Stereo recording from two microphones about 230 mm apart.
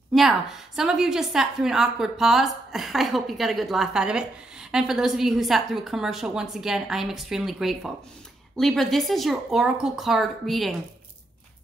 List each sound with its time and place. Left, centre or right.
0.1 s a woman's voice: centre